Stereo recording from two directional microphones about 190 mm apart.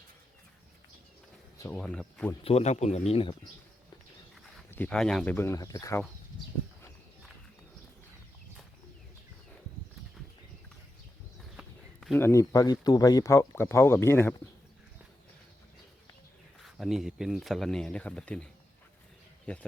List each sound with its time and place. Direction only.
1.5 s speech: 15° left (ahead or behind)
1.8 s speech: 5° left (ahead or behind)
2.4 s speech: 35° left (ahead or behind)
4.7 s speech: 5° left (ahead or behind)
11.5 s speech: centre (ahead or behind)
16.7 s speech: centre (ahead or behind)
19.5 s speech: 5° left (ahead or behind)